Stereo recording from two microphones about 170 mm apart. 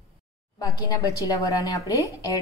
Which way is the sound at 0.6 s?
20° left (ahead or behind).